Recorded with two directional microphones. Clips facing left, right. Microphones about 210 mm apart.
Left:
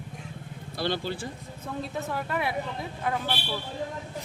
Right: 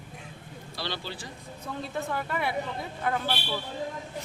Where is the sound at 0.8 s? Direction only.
50° left (ahead or behind).